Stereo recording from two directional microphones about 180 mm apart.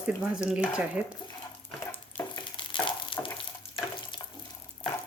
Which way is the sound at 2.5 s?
30° left (ahead or behind).